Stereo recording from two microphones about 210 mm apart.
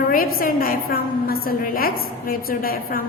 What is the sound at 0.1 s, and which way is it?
A woman's voice, 45° left (ahead or behind).